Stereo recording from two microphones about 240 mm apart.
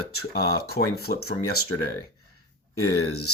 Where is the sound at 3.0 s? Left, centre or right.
Left.